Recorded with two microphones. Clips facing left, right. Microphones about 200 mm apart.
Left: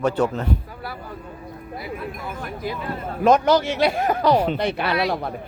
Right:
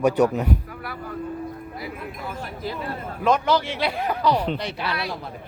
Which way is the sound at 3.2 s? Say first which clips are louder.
Left 4 dB; 45° left (ahead or behind).